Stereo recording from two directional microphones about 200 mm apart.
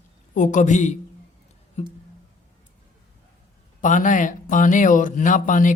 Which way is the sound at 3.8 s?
40° left (ahead or behind).